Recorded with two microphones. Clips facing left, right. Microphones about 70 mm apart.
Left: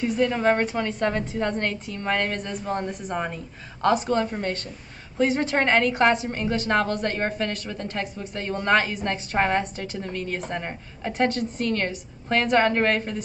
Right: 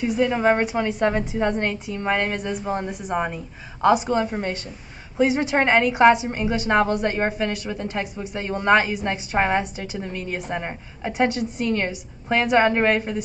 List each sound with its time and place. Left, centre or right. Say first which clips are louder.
0.0 s a woman's voice: right 2 dB; centre